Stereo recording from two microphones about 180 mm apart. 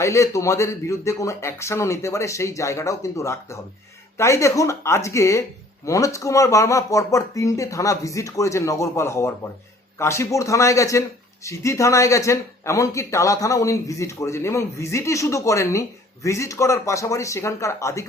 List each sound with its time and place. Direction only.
0.0 s speech: 15° left (ahead or behind)